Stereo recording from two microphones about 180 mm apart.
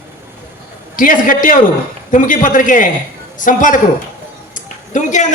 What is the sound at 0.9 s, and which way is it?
A man's voice, 50° left (ahead or behind).